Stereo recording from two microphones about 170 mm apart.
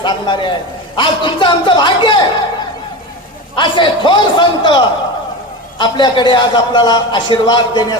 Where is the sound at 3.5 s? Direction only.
30° left (ahead or behind).